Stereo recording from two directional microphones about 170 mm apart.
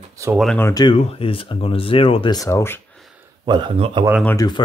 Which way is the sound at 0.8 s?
30° left (ahead or behind).